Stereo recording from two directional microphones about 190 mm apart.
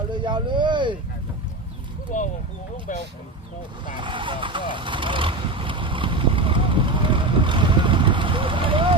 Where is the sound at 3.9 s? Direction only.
25° right (ahead or behind).